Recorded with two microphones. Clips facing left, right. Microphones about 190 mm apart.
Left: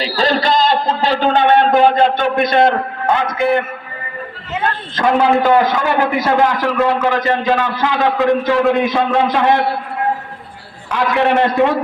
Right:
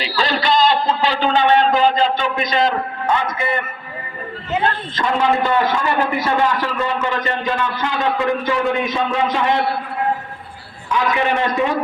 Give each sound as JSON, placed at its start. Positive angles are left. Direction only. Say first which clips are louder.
{"t": 0.0, "sound": "a sound", "louder": "left 4 dB", "side_deg": 45}
{"t": 2.4, "sound": "a man's voice", "louder": "left 7 dB", "side_deg": 55}
{"t": 4.9, "sound": "a man's voice", "louder": "left 6 dB", "side_deg": 70}
{"t": 5.4, "sound": "a man's voice", "louder": "left 5 dB", "side_deg": 85}
{"t": 8.6, "sound": "a man's voice", "louder": "left 5 dB", "side_deg": 0}
{"t": 8.9, "sound": "a man's voice", "louder": "left 4 dB", "side_deg": 70}
{"t": 10.8, "sound": "a man's voice", "louder": "left 3 dB", "side_deg": 65}